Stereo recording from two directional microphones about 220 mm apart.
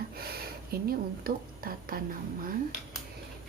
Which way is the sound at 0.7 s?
40° right (ahead or behind).